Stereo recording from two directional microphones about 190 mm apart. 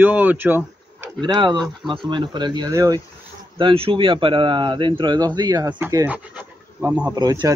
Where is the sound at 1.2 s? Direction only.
20° right (ahead or behind).